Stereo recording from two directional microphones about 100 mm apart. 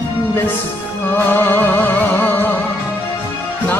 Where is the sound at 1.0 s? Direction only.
20° left (ahead or behind).